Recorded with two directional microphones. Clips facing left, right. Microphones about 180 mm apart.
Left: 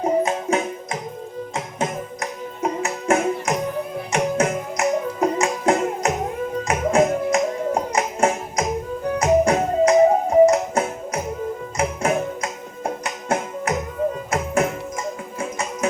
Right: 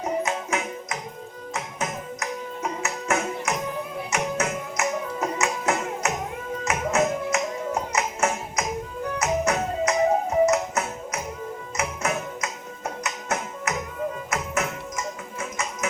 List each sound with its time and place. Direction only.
0.0 s music: 30° left (ahead or behind)
2.6 s music: 30° left (ahead or behind)